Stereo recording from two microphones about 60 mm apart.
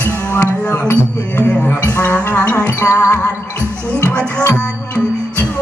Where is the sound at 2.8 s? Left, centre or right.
Left.